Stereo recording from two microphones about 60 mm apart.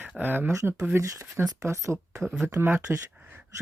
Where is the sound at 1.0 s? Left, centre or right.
Right.